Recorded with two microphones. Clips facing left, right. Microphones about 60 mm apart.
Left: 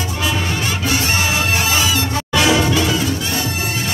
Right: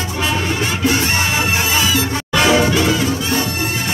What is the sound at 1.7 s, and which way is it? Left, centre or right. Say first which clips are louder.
Music: right 1 dB; centre.